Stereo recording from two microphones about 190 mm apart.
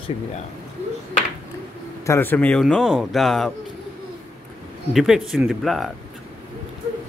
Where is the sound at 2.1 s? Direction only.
10° left (ahead or behind).